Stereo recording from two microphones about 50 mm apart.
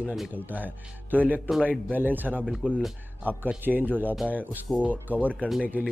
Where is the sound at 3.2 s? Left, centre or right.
Right.